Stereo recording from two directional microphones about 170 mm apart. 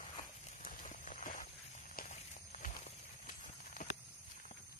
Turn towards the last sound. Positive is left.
turn(degrees=45)  # may be behind; listen again after turning